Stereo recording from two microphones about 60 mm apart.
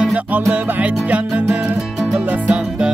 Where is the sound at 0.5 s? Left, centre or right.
Right.